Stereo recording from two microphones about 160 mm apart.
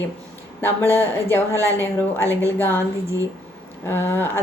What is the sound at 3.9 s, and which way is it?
Speech, 15° left (ahead or behind).